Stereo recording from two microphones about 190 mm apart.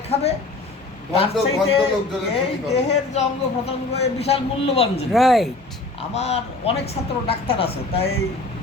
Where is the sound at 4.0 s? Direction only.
35° left (ahead or behind).